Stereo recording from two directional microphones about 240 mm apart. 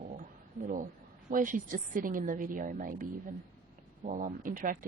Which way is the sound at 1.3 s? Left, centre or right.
Right.